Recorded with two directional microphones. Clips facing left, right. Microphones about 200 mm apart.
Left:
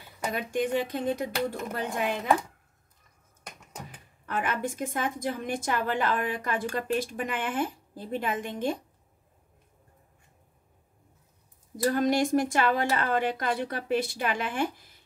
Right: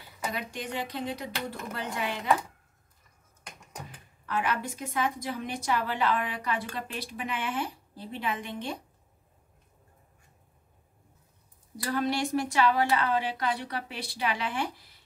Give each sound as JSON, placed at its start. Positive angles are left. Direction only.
{"t": 0.3, "sound": "a woman's voice", "side_deg": 50}
{"t": 4.3, "sound": "a woman's voice", "side_deg": 50}
{"t": 11.7, "sound": "a woman's voice", "side_deg": 45}